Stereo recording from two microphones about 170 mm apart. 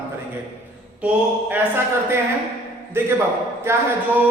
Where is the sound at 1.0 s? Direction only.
10° right (ahead or behind).